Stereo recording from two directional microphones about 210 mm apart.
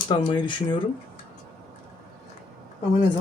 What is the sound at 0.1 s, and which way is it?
Speech, 25° left (ahead or behind).